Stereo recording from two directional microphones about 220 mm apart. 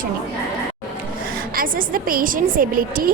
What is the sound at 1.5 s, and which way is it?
A woman's voice, 40° right (ahead or behind).